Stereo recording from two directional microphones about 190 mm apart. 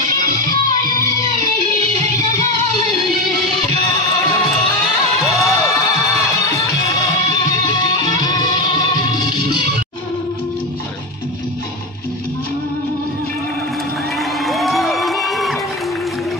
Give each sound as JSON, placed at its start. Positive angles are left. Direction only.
{"t": 0.4, "sound": "music", "side_deg": -45}
{"t": 1.8, "sound": "music", "side_deg": -35}
{"t": 4.4, "sound": "music", "side_deg": 0}
{"t": 6.5, "sound": "music", "side_deg": 15}
{"t": 14.4, "sound": "a sound", "side_deg": 0}